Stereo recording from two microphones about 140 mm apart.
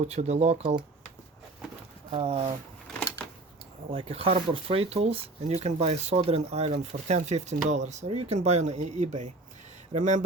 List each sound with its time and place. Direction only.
0.0 s speech: 50° right (ahead or behind)
2.0 s speech: 45° right (ahead or behind)
2.9 s a sound: 5° left (ahead or behind)
3.9 s speech: 45° right (ahead or behind); by 10.2 s 60° right (ahead or behind)